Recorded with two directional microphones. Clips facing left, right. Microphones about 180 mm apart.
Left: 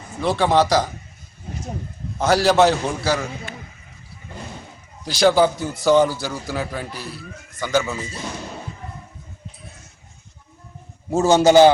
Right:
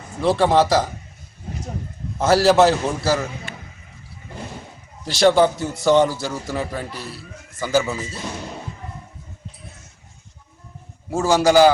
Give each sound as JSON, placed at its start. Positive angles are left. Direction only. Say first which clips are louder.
{"t": 0.2, "sound": "a man's voice", "louder": "right 1 dB", "side_deg": 0}
{"t": 2.1, "sound": "a man's voice", "louder": "right 2 dB", "side_deg": -5}
{"t": 5.0, "sound": "a man's voice", "louder": "right 1 dB", "side_deg": 0}
{"t": 11.1, "sound": "a man's voice", "louder": "left 2 dB", "side_deg": 25}